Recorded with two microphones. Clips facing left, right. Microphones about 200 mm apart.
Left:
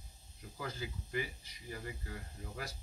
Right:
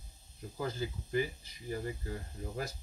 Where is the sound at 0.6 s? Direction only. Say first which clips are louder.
Right 6 dB; 40° right (ahead or behind).